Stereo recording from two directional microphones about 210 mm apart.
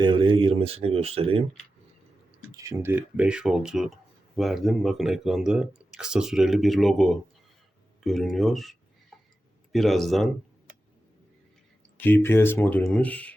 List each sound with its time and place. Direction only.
0.0 s speech: 25° right (ahead or behind)
2.4 s speech: 15° right (ahead or behind); by 10.2 s centre (ahead or behind)
11.9 s speech: 10° left (ahead or behind)